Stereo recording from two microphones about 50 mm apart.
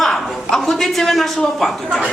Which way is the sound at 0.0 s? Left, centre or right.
Centre.